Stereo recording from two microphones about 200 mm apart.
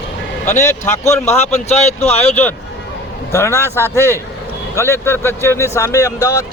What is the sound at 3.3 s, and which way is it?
Speech, 10° left (ahead or behind).